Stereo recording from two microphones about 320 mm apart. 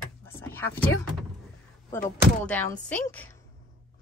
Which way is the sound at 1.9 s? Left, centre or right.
Centre.